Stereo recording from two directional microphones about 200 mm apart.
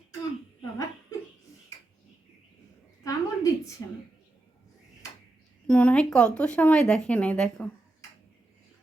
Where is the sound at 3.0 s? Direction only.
15° left (ahead or behind).